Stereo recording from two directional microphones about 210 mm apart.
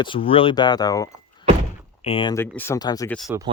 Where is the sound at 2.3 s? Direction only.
10° left (ahead or behind).